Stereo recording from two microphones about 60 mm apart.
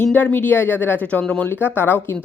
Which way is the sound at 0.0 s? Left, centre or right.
Left.